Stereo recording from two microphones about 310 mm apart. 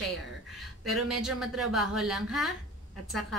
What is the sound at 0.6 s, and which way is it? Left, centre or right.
Speech, centre.